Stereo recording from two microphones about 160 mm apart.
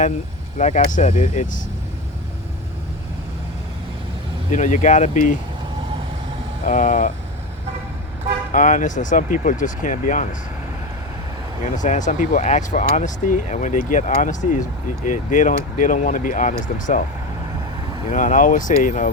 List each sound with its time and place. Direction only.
0.6 s speech: 50° left (ahead or behind)
4.5 s speech: 50° left (ahead or behind)
6.7 s speech: 55° left (ahead or behind)
8.5 s speech: 50° left (ahead or behind)
11.6 s speech: 50° left (ahead or behind)
18.1 s speech: 55° left (ahead or behind)